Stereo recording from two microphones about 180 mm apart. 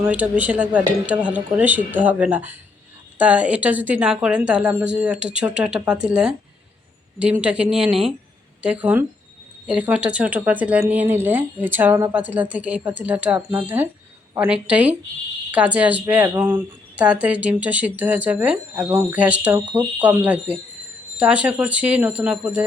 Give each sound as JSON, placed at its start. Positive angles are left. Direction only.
{"t": 0.0, "sound": "speech", "side_deg": -10}